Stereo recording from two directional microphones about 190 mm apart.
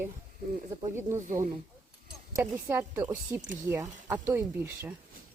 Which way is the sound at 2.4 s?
15° right (ahead or behind).